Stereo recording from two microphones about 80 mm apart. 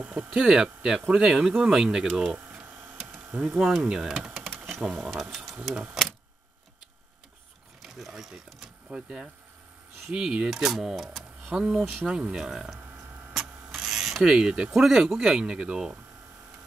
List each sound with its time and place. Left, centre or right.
0.0 s speech: right
0.3 s speech: centre
3.3 s speech: right
3.5 s speech: centre
7.8 s speech: centre